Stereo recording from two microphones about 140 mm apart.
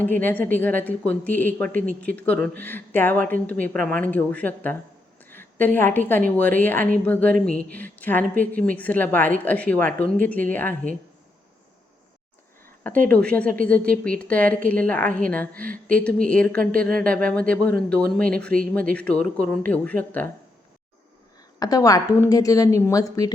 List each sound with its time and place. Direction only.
0.0 s a woman's voice: 15° left (ahead or behind)
13.1 s a woman's voice: 10° left (ahead or behind)
21.6 s speech: 25° left (ahead or behind)